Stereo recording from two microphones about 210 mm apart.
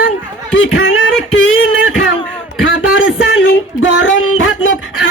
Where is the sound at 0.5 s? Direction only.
65° left (ahead or behind).